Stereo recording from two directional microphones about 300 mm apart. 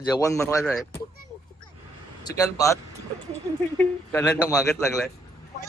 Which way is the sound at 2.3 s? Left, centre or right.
Centre.